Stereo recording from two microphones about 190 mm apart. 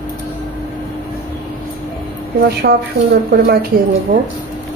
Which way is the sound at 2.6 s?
55° right (ahead or behind).